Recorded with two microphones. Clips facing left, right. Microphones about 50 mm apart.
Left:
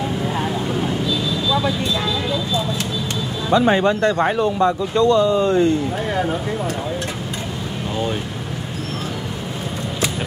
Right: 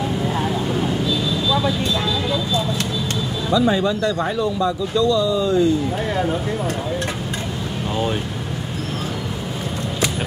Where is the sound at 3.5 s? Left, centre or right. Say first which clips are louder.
Left 3 dB; left.